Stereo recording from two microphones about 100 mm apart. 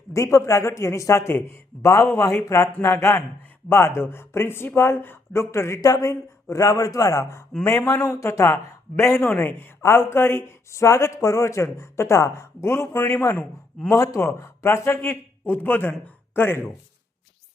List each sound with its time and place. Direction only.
0.1 s speech: 30° left (ahead or behind)